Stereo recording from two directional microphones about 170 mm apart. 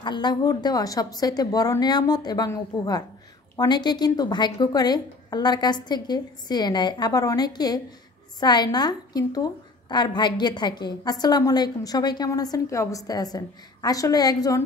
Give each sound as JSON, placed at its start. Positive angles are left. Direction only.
{"t": 0.0, "sound": "a woman's voice", "side_deg": 25}